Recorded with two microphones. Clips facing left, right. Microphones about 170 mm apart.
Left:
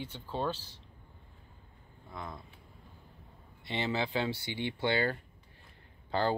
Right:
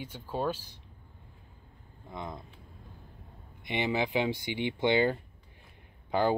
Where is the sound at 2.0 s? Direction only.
20° right (ahead or behind).